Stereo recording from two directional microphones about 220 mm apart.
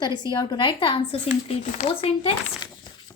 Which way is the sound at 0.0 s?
20° left (ahead or behind).